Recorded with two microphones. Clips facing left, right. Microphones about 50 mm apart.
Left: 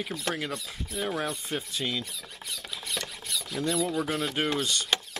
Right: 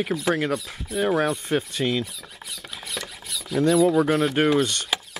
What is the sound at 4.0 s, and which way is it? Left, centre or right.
Speech, right.